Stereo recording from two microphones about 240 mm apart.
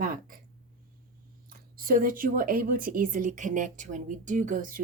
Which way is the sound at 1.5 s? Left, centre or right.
Right.